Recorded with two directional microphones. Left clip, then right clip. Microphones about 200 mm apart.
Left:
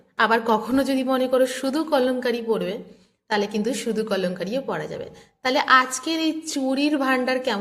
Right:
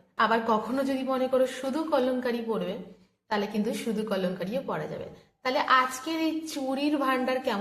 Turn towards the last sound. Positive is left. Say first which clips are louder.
# left 5 dB
turn(degrees=40)  # may be behind; listen again after turning